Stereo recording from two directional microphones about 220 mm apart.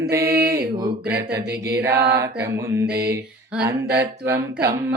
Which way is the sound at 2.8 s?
50° right (ahead or behind).